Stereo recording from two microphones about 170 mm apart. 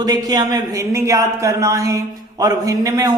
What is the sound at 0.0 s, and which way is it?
Speech, 20° right (ahead or behind).